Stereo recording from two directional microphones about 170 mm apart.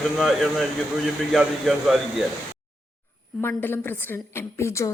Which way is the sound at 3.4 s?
15° left (ahead or behind).